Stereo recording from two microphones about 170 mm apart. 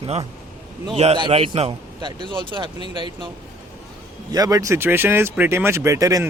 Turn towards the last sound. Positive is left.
turn(degrees=-20)  # may be behind; listen again after turning